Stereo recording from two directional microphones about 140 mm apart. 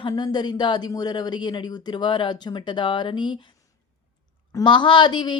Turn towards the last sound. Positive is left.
turn(degrees=35)  # may be behind; listen again after turning